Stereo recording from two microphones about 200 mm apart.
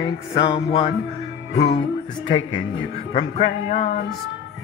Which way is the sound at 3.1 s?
35° left (ahead or behind).